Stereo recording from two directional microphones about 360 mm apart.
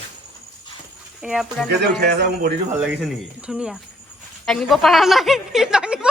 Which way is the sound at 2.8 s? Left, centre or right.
Centre.